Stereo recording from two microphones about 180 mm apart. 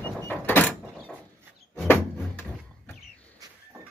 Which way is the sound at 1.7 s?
5° left (ahead or behind).